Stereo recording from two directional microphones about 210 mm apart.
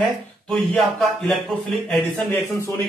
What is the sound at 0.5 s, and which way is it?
Speech, centre (ahead or behind).